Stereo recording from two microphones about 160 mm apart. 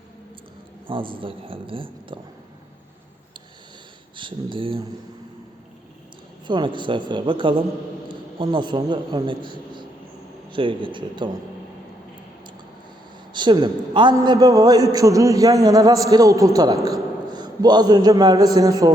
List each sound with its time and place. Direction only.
0.9 s speech: 30° right (ahead or behind)
4.2 s speech: 30° right (ahead or behind)
6.5 s a man's voice: 30° right (ahead or behind)
13.3 s a man's voice: 30° right (ahead or behind)